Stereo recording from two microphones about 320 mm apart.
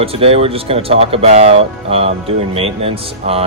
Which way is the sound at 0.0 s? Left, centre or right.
Centre.